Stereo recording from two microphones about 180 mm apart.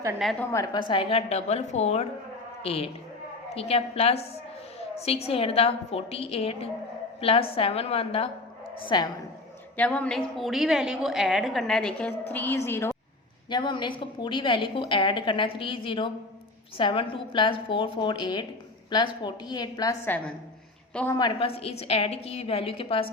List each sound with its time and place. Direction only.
0.2 s a woman's voice: centre (ahead or behind)
0.5 s a woman's voice: 20° left (ahead or behind)
9.7 s a woman's voice: 10° left (ahead or behind)
13.5 s a woman's voice: 25° left (ahead or behind)
20.1 s a woman's voice: 10° left (ahead or behind)
21.2 s a woman's voice: 30° left (ahead or behind)